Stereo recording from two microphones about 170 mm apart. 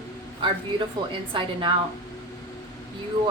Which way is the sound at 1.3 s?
30° right (ahead or behind).